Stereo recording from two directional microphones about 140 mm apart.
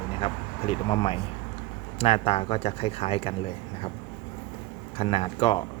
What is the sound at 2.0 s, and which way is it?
Speech, 45° left (ahead or behind).